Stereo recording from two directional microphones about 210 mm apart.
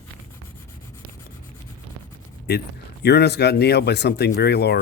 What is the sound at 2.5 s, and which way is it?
Speech, 50° left (ahead or behind).